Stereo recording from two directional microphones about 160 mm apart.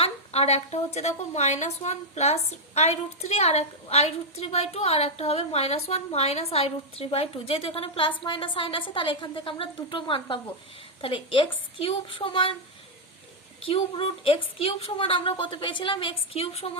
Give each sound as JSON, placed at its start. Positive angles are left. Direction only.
{"t": 0.0, "sound": "a sound", "side_deg": 40}
{"t": 0.9, "sound": "a woman's voice", "side_deg": 45}
{"t": 13.7, "sound": "a woman's voice", "side_deg": 35}